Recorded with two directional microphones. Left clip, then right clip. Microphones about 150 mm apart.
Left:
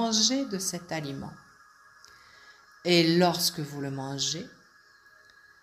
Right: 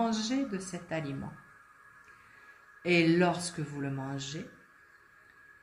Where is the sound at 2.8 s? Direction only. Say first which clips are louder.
Left 4 dB; 40° left (ahead or behind).